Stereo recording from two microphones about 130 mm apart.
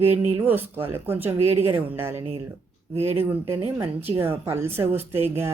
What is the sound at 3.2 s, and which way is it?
Speech, 20° right (ahead or behind).